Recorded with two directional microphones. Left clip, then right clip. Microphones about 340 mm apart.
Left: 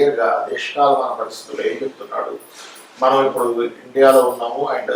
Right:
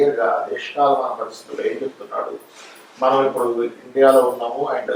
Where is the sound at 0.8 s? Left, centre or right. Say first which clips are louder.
Left 2 dB; centre.